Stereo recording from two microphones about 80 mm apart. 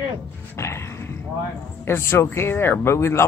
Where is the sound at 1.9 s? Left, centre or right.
Left.